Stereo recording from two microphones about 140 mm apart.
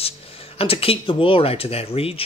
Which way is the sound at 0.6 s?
45° left (ahead or behind).